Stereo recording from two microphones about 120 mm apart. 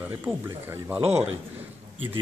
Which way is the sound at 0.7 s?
15° right (ahead or behind).